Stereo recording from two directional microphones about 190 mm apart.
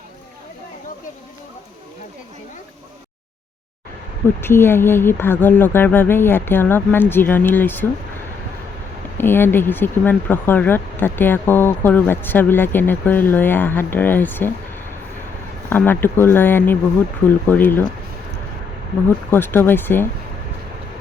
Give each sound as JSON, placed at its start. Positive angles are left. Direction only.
{"t": 4.4, "sound": "speech", "side_deg": 10}
{"t": 9.1, "sound": "speech", "side_deg": 10}
{"t": 15.7, "sound": "speech", "side_deg": 10}
{"t": 19.0, "sound": "speech", "side_deg": 10}